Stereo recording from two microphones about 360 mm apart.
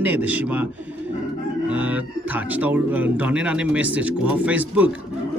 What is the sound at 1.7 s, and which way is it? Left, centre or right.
A man's voice, centre.